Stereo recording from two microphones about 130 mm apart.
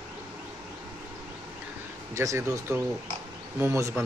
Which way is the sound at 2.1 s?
25° right (ahead or behind).